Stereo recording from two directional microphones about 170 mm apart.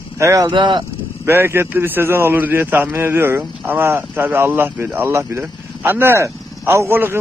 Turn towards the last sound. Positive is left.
turn(degrees=-15)  # may be behind; listen again after turning